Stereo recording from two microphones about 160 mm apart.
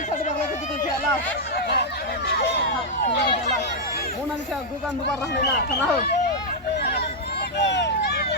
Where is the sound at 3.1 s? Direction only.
90° left.